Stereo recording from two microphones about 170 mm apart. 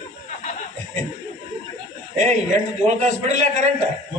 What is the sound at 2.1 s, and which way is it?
A man's voice, 45° right (ahead or behind).